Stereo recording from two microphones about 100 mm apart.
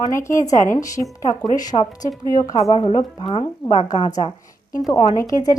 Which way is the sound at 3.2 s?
70° left (ahead or behind).